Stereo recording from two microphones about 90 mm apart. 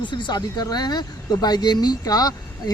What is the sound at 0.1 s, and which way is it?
Speech, 55° left (ahead or behind).